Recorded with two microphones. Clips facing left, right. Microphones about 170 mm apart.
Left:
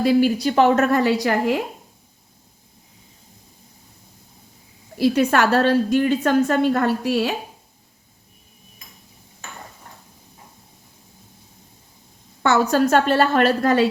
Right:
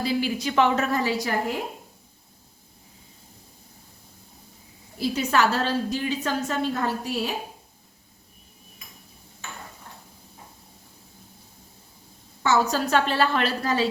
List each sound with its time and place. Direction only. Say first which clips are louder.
0.0 s a woman's voice: left 9 dB; 50° left (ahead or behind); by 1.5 s 70° left (ahead or behind)
4.9 s a woman's voice: left 6 dB; 65° left (ahead or behind)
12.4 s a woman's voice: left 5 dB; 55° left (ahead or behind)